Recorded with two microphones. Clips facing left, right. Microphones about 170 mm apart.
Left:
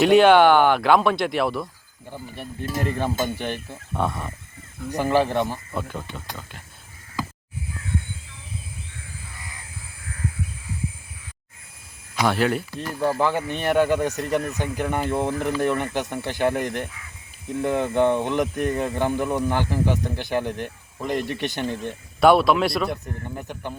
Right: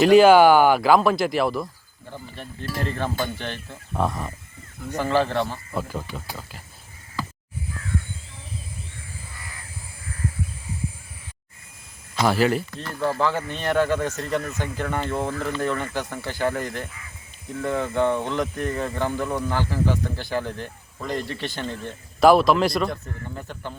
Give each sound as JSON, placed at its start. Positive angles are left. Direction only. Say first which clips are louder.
{"t": 0.0, "sound": "speech", "louder": "right 1 dB", "side_deg": 0}
{"t": 2.0, "sound": "speech", "louder": "left 2 dB", "side_deg": 10}
{"t": 3.9, "sound": "speech", "louder": "right 1 dB", "side_deg": 0}
{"t": 4.9, "sound": "speech", "louder": "left 1 dB", "side_deg": 15}
{"t": 5.7, "sound": "speech", "louder": "right 1 dB", "side_deg": -5}
{"t": 12.2, "sound": "speech", "louder": "right 1 dB", "side_deg": 0}
{"t": 12.8, "sound": "speech", "louder": "left 3 dB", "side_deg": 15}
{"t": 22.2, "sound": "speech", "louder": "right 1 dB", "side_deg": 0}
{"t": 23.0, "sound": "speech", "louder": "left 2 dB", "side_deg": 15}